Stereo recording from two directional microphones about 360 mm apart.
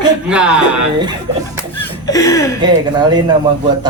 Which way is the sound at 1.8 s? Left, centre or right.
Centre.